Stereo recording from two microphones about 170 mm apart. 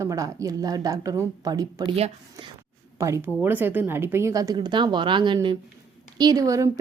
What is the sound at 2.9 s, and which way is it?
Speech, 15° right (ahead or behind).